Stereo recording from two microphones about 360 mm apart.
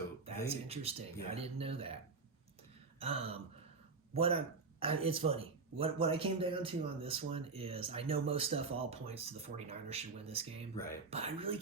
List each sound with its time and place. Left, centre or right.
0.3 s speech: centre
3.0 s speech: centre